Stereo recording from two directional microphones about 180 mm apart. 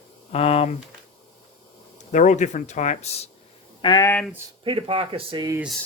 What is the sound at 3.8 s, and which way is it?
Speech, 25° left (ahead or behind).